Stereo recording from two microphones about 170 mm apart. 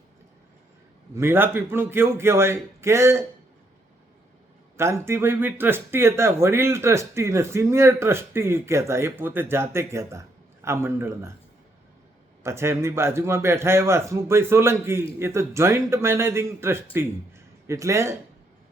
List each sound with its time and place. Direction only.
1.1 s speech: 15° right (ahead or behind)
4.8 s speech: 15° right (ahead or behind)
12.4 s speech: 15° right (ahead or behind)